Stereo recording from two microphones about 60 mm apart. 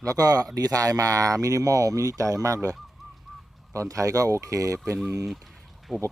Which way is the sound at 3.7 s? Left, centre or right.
Right.